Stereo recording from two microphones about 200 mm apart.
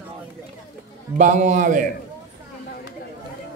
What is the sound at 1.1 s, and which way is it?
Speech, 40° right (ahead or behind).